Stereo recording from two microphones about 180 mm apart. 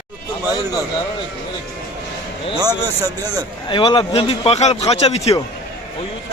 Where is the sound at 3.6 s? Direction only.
25° left (ahead or behind).